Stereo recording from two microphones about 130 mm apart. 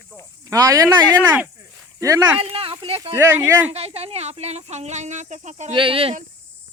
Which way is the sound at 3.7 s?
50° right (ahead or behind).